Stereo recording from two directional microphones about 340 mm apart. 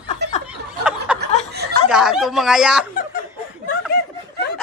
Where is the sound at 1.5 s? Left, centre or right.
Right.